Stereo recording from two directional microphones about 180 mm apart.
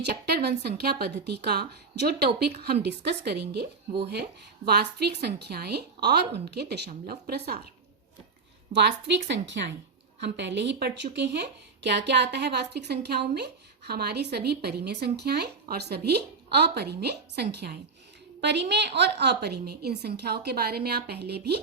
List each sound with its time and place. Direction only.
0.0 s a woman's voice: 65° right (ahead or behind)
8.7 s a woman's voice: 70° right (ahead or behind)